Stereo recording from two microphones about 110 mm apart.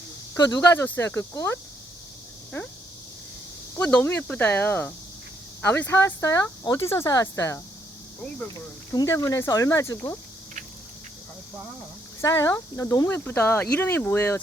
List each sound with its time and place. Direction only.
0.3 s speech: 35° left (ahead or behind)
0.7 s speech: 20° left (ahead or behind)
2.5 s speech: 25° left (ahead or behind)
3.8 s speech: 15° left (ahead or behind)
9.0 s speech: 30° left (ahead or behind)
12.2 s speech: 30° left (ahead or behind)